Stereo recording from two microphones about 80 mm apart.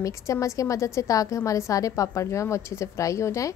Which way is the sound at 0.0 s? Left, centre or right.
Left.